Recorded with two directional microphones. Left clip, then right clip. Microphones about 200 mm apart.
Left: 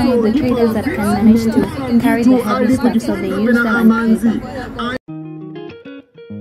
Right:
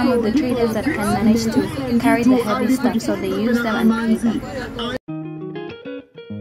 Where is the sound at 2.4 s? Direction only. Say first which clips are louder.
Left 4 dB; 50° left (ahead or behind).